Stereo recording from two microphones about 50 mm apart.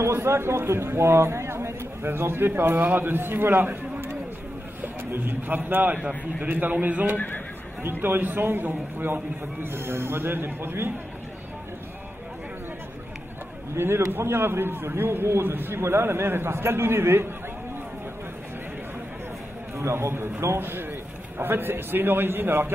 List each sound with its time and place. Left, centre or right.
0.0 s a man's voice: right
2.0 s a man's voice: right
4.8 s a man's voice: right
7.2 s speech: left
8.0 s a man's voice: right
13.7 s a man's voice: right
19.8 s a man's voice: right